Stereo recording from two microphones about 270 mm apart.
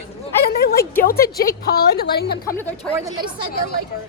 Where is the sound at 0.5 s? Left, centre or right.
Left.